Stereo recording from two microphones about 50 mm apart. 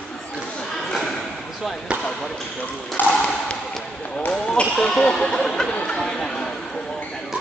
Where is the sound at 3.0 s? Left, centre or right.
Left.